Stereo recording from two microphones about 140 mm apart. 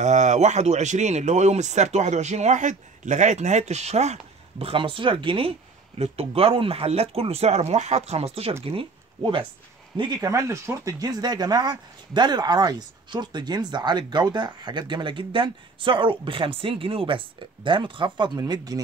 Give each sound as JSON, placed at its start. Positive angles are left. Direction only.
{"t": 0.0, "sound": "speech", "side_deg": -55}
{"t": 10.2, "sound": "speech", "side_deg": -20}